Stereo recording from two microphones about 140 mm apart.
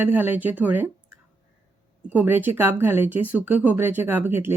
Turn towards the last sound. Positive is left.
turn(degrees=-15)  # may be behind; listen again after turning